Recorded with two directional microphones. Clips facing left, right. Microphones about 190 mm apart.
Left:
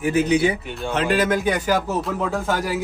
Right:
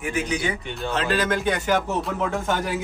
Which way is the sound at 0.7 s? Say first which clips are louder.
Left 3 dB; 10° left (ahead or behind).